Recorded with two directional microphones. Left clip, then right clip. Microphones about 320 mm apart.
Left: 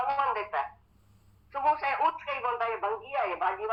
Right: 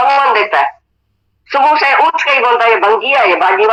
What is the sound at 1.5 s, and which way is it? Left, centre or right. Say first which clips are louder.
Speech: right 18 dB; right.